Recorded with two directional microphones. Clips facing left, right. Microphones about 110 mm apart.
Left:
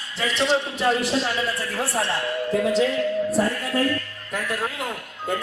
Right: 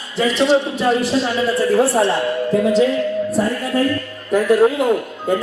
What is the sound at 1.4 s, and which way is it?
Speech, 35° right (ahead or behind).